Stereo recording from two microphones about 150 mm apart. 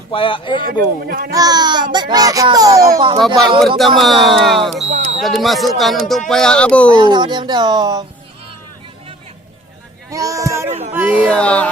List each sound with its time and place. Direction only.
0.1 s speech: 35° left (ahead or behind)
1.0 s speech: 90° right
1.3 s a child's voice: 25° right (ahead or behind)
3.8 s speech: centre (ahead or behind)
6.9 s a child's voice: 30° right (ahead or behind)
10.1 s a sound: 20° right (ahead or behind)
10.7 s a sound: 45° right (ahead or behind)
11.3 s music: 5° left (ahead or behind)